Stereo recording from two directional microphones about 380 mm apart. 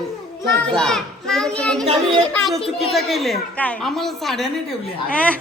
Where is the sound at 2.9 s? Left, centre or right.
Centre.